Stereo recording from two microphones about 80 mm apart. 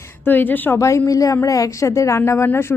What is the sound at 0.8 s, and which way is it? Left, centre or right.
A woman's voice, left.